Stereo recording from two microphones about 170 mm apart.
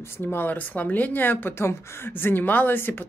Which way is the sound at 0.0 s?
15° left (ahead or behind).